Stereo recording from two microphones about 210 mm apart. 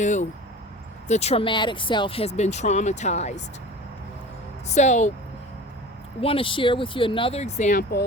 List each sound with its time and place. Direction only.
0.0 s speech: 35° left (ahead or behind)
4.7 s speech: 35° left (ahead or behind)
6.1 s speech: 25° left (ahead or behind); by 8.0 s 40° left (ahead or behind)